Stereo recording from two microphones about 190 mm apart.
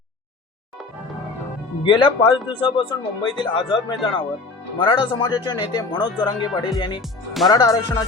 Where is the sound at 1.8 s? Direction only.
25° left (ahead or behind).